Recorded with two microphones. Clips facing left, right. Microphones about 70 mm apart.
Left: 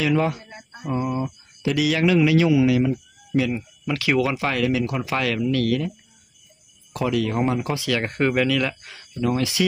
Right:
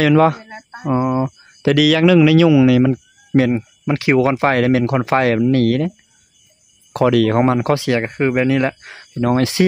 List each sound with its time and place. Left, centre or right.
0.0 s speech: right
0.7 s speech: right
3.3 s speech: right
3.8 s speech: right
8.0 s speech: centre
8.5 s speech: right